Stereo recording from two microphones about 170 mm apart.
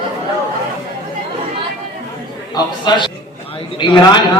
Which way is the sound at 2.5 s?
25° left (ahead or behind).